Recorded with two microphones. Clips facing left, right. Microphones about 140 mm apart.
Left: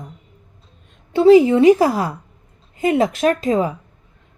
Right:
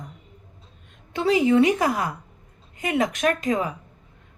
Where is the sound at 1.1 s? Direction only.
30° left (ahead or behind).